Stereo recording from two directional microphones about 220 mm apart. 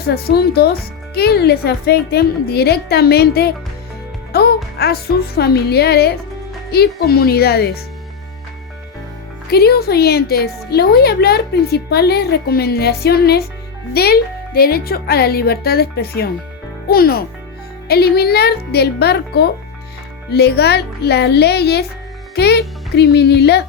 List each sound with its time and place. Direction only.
0.1 s speech: 45° left (ahead or behind)
9.5 s speech: 45° left (ahead or behind)